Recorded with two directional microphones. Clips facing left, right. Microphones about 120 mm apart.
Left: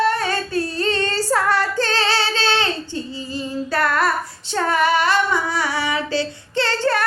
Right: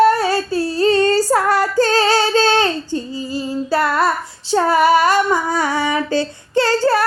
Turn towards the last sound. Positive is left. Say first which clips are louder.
# right 5 dB
turn(degrees=-35)  # may be behind; listen again after turning